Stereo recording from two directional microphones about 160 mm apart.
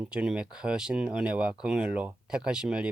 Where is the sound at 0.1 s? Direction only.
5° right (ahead or behind).